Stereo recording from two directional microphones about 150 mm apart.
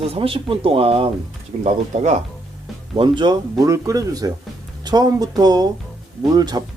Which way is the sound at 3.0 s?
30° right (ahead or behind).